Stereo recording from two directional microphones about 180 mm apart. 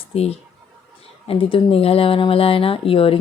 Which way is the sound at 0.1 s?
35° left (ahead or behind).